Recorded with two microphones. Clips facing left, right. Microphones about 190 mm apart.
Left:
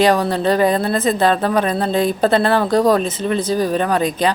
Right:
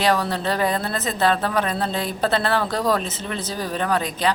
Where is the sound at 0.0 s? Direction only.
15° left (ahead or behind).